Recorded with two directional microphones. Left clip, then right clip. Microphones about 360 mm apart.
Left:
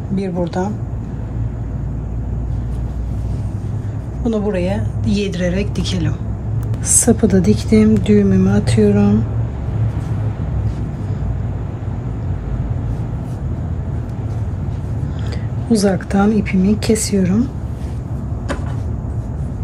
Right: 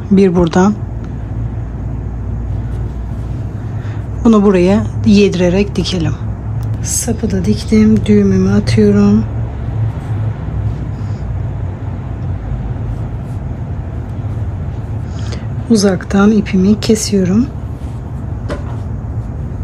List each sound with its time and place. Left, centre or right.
0.6 s speech: right
4.2 s a woman's voice: centre
6.9 s speech: centre
15.7 s speech: centre